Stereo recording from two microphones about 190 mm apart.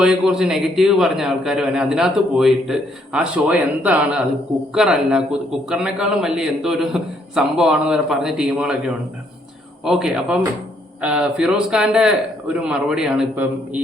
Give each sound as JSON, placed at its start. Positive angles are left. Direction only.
{"t": 0.0, "sound": "a man's voice", "side_deg": -5}